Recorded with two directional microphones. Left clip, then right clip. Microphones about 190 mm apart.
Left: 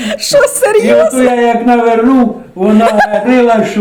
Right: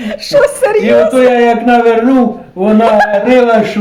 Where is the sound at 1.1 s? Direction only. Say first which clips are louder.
Right 2 dB; 15° right (ahead or behind).